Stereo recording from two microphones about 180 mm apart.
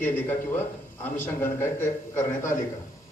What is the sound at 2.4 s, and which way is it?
Speech, 45° left (ahead or behind).